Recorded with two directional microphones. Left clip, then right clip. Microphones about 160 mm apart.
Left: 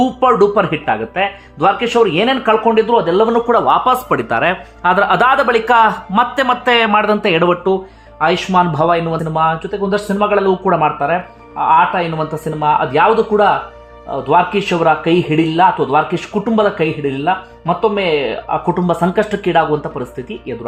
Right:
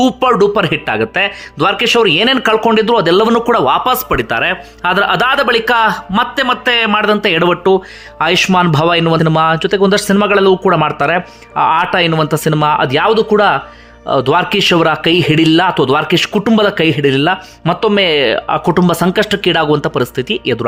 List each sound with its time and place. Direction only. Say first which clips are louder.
0.0 s a man's voice: right 1 dB; 20° right (ahead or behind); by 3.5 s 35° right (ahead or behind)
3.5 s speech: even; 10° right (ahead or behind); by 12.0 s 35° right (ahead or behind)
12.1 s a man's voice: right 7 dB; 25° right (ahead or behind)